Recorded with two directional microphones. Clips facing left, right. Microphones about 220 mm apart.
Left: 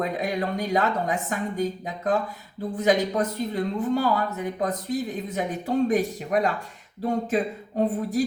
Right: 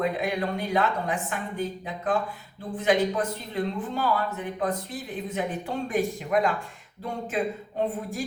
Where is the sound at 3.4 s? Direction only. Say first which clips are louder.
Left 12 dB; 40° left (ahead or behind).